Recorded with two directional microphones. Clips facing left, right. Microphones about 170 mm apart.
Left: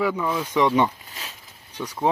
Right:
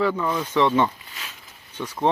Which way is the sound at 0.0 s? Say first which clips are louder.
Right 1 dB; 10° left (ahead or behind).